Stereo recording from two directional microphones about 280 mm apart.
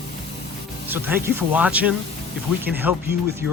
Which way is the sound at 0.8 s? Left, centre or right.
Centre.